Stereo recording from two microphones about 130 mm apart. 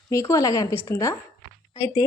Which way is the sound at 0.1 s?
25° left (ahead or behind).